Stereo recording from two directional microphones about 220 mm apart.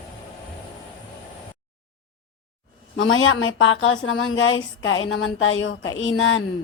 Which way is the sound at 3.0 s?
65° left (ahead or behind).